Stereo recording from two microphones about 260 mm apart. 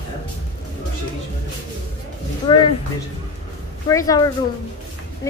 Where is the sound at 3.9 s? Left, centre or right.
Centre.